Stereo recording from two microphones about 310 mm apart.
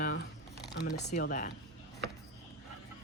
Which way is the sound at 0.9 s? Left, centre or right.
Left.